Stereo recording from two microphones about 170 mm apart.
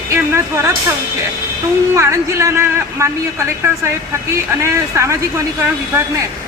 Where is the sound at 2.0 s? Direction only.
15° right (ahead or behind).